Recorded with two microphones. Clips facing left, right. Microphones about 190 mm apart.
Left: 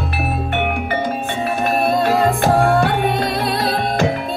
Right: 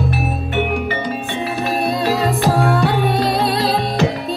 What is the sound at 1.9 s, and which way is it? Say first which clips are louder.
Music: left 3 dB; 55° left (ahead or behind).